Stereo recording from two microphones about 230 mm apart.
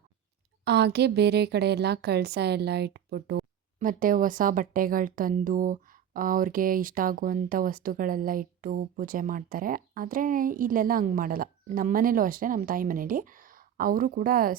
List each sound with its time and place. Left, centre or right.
0.6 s a woman's voice: right